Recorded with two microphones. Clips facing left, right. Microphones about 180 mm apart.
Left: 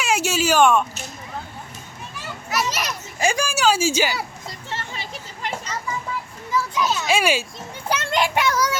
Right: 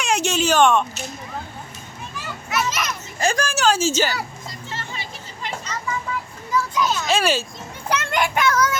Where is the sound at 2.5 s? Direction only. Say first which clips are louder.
Even; 35° left (ahead or behind).